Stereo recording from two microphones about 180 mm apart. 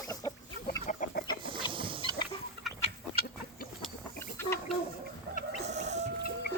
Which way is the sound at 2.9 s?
65° right (ahead or behind).